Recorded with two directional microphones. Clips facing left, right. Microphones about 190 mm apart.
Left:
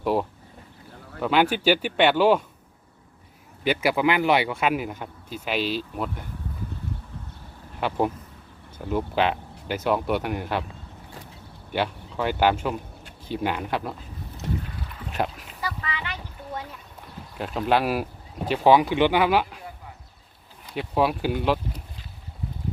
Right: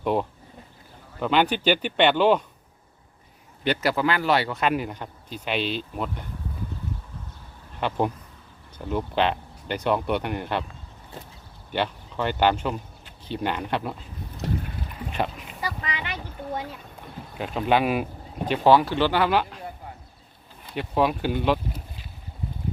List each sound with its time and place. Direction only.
0.0 s speech: 5° left (ahead or behind)
3.6 s speech: 10° left (ahead or behind)
7.8 s speech: 5° left (ahead or behind)
11.7 s speech: 5° left (ahead or behind)
15.1 s boat: centre (ahead or behind)
15.6 s boat: 15° right (ahead or behind)
17.3 s speech: centre (ahead or behind)
20.7 s speech: 5° left (ahead or behind)